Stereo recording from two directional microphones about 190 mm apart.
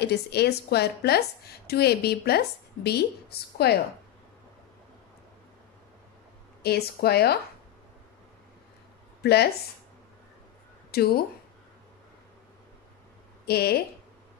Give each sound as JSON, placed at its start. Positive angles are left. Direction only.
{"t": 0.0, "sound": "a woman's voice", "side_deg": 60}
{"t": 6.6, "sound": "a woman's voice", "side_deg": 55}
{"t": 9.2, "sound": "speech", "side_deg": 60}
{"t": 10.9, "sound": "speech", "side_deg": 55}
{"t": 13.5, "sound": "a woman's voice", "side_deg": 55}